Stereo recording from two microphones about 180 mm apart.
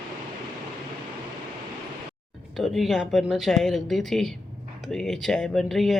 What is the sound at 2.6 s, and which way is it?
Speech, centre (ahead or behind).